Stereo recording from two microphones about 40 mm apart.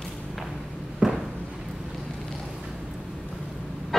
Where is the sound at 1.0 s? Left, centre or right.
Right.